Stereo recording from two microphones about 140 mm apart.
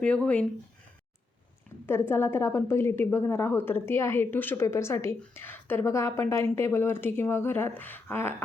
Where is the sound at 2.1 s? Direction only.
15° left (ahead or behind).